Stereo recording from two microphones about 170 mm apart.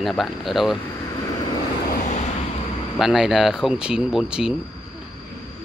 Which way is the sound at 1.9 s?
45° left (ahead or behind).